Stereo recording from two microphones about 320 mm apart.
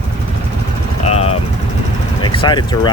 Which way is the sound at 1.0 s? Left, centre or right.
Centre.